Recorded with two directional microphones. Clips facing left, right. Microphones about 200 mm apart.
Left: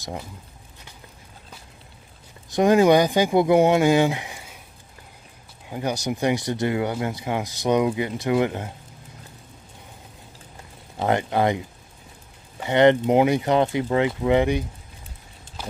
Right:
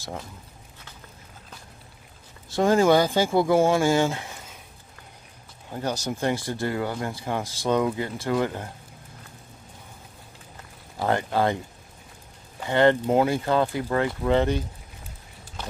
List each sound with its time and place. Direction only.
0.0 s speech: 15° left (ahead or behind)
2.5 s speech: 15° left (ahead or behind)
5.7 s speech: 10° left (ahead or behind)
11.0 s speech: 20° left (ahead or behind)